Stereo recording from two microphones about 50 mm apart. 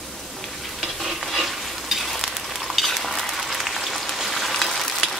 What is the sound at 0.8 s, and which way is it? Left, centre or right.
Stir, centre.